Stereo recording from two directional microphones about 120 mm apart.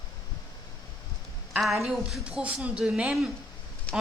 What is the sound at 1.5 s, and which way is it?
A woman's voice, centre (ahead or behind).